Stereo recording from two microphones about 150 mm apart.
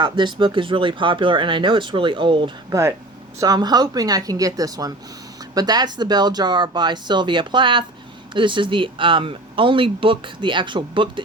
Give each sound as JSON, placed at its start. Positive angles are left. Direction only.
{"t": 0.0, "sound": "speech", "side_deg": -30}